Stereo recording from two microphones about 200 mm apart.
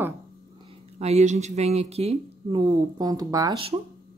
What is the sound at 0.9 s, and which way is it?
Speech, 35° right (ahead or behind).